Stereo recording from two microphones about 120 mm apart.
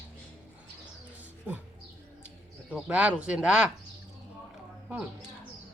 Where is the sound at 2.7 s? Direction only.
10° right (ahead or behind).